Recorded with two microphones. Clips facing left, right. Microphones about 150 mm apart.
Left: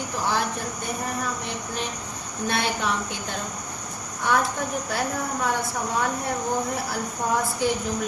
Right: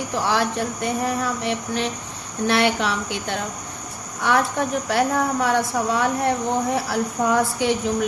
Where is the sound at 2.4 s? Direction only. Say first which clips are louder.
Right 6 dB; 90° right.